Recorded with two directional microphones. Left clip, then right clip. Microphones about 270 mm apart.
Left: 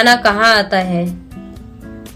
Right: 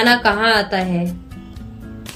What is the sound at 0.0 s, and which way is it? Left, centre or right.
A woman's voice, centre.